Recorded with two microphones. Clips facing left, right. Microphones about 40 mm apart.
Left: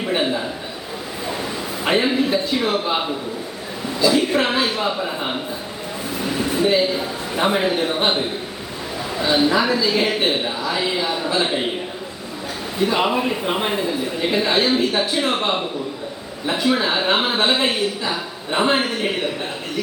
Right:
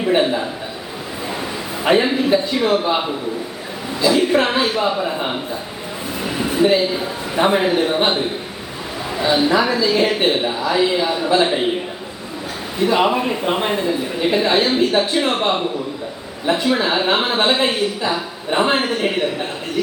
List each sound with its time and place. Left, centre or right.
0.2 s a man's voice: centre
1.8 s a man's voice: centre
6.2 s a sound: centre
6.9 s a man's voice: centre
12.8 s a man's voice: centre